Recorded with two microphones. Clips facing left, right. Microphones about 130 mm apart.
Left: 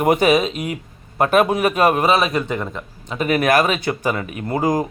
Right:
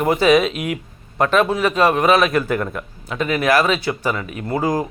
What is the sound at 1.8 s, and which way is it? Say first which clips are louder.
Speech: right 1 dB; 45° left (ahead or behind).